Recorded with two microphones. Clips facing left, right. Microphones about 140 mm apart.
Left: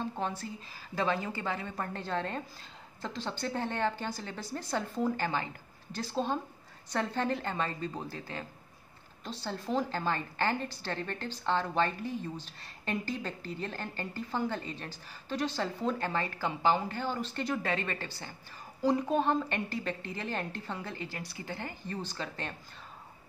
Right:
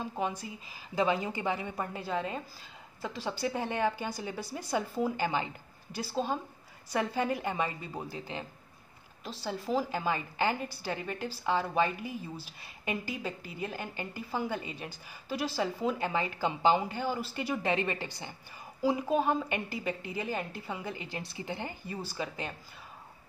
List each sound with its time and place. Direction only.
0.0 s a woman's voice: 10° right (ahead or behind)
9.2 s a woman's voice: 5° right (ahead or behind)
17.6 s a woman's voice: 20° right (ahead or behind)